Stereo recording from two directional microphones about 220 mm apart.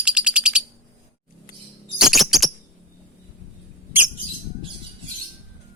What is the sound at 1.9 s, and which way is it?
Chirp, centre (ahead or behind).